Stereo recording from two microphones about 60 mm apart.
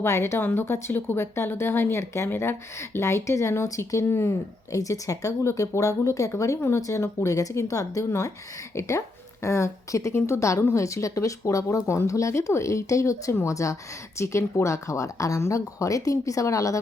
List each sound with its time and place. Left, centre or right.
0.0 s speech: left
0.3 s speech: left
4.7 s a woman's voice: left
6.4 s a woman's voice: left